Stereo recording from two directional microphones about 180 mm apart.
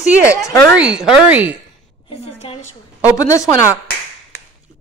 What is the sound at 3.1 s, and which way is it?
Speech, 20° left (ahead or behind).